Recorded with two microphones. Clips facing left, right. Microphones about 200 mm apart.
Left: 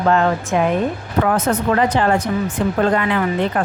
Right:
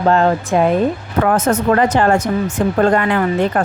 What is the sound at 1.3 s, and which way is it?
Speech, 45° right (ahead or behind).